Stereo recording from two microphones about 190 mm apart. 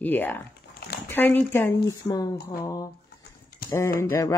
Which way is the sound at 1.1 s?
10° left (ahead or behind).